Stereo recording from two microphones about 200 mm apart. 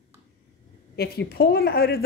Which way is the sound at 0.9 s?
55° left (ahead or behind).